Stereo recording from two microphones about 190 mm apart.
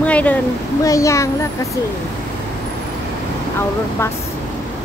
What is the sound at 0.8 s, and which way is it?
Speech, 15° left (ahead or behind).